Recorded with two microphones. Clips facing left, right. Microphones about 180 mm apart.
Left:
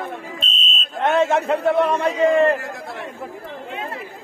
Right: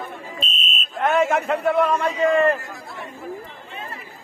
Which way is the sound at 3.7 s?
85° left.